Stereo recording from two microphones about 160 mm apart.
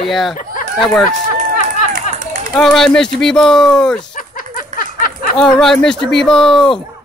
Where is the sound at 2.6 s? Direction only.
5° left (ahead or behind).